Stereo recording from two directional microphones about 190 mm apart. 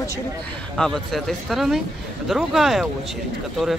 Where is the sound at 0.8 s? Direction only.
Centre (ahead or behind).